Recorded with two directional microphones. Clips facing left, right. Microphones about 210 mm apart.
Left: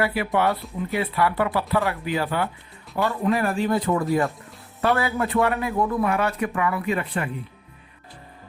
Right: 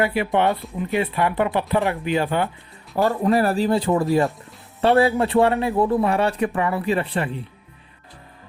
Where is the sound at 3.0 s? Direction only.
40° right (ahead or behind).